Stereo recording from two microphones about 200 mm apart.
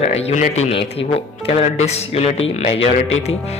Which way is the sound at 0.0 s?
30° left (ahead or behind).